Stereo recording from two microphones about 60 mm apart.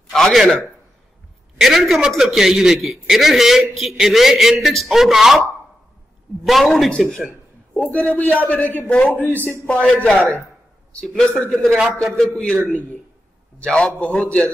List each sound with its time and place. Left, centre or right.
0.1 s a man's voice: centre
1.6 s a man's voice: centre
6.4 s a man's voice: centre
7.0 s a man's voice: centre
7.7 s a man's voice: left
13.6 s a man's voice: centre